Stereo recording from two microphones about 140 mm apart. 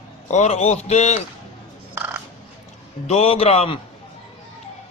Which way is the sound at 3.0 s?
50° left (ahead or behind).